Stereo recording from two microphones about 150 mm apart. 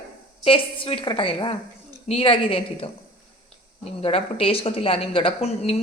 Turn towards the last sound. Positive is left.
turn(degrees=40)  # may be behind; listen again after turning